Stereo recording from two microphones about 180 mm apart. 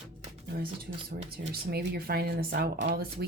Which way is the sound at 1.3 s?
60° right (ahead or behind).